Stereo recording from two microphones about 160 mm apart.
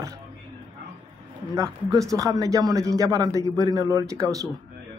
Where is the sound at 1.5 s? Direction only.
20° right (ahead or behind).